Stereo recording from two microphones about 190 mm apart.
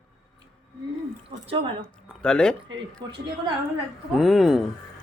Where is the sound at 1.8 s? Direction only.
5° left (ahead or behind).